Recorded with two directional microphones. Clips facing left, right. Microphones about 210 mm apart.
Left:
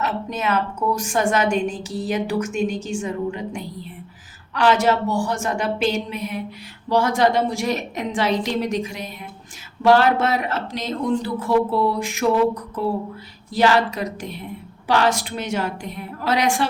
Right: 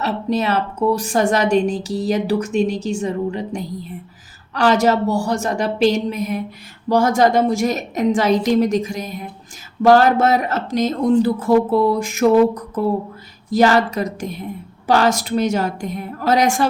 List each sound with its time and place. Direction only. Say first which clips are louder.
0.0 s a woman's voice: right 5 dB; 35° right (ahead or behind)